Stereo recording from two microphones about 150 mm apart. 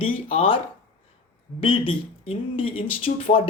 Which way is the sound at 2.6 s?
35° left (ahead or behind).